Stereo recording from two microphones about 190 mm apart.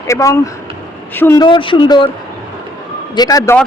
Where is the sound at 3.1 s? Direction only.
20° left (ahead or behind).